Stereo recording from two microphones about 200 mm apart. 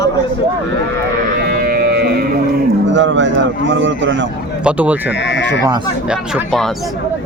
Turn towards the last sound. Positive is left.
turn(degrees=0)  # may be behind; listen again after turning